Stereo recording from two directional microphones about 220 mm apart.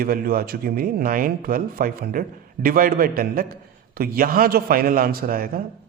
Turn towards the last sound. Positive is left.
turn(degrees=-40)  # may be behind; listen again after turning